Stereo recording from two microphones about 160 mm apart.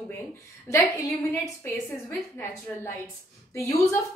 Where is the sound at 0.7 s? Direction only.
15° left (ahead or behind).